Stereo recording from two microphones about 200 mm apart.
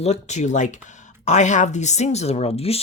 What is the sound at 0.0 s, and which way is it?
Speech, 35° left (ahead or behind).